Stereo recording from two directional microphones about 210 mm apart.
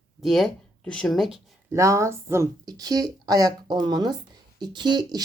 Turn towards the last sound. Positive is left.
turn(degrees=-20)  # may be behind; listen again after turning